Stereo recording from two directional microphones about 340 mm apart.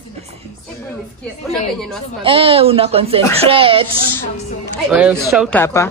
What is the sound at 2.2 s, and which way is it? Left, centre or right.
Speech, centre.